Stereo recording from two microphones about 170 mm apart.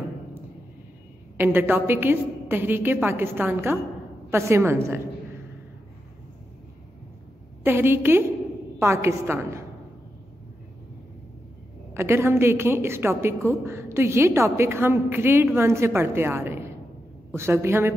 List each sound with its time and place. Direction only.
1.4 s a woman's voice: 10° right (ahead or behind)
7.6 s a woman's voice: 15° right (ahead or behind)
11.9 s a woman's voice: 15° right (ahead or behind)